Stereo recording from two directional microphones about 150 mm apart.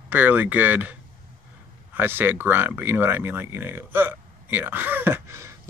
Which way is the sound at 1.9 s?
15° right (ahead or behind).